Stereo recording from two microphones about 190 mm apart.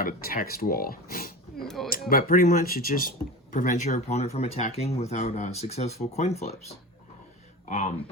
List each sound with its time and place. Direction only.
0.0 s speech: 50° left (ahead or behind)
1.6 s speech: centre (ahead or behind)
1.9 s speech: 50° left (ahead or behind)
7.7 s speech: 40° left (ahead or behind)